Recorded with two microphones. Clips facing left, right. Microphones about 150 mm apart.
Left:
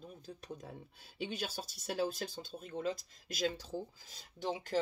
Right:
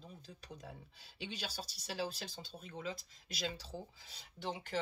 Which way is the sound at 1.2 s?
50° left (ahead or behind).